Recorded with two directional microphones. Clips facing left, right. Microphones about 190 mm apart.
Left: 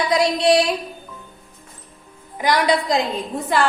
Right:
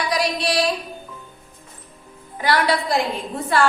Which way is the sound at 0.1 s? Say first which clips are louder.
Left 8 dB; 20° left (ahead or behind).